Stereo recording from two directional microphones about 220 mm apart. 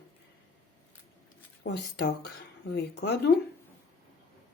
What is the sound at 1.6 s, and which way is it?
Speech, 50° left (ahead or behind).